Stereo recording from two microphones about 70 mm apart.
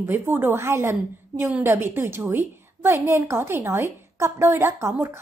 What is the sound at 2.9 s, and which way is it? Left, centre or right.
A woman's voice, right.